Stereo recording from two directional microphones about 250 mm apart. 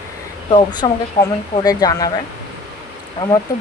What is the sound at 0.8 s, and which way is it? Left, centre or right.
Speech, centre.